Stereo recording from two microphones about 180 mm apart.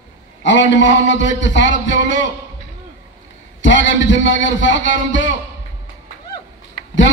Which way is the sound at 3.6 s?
90° left.